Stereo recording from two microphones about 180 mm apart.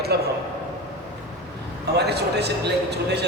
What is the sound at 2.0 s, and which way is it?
A man's voice, 65° right (ahead or behind).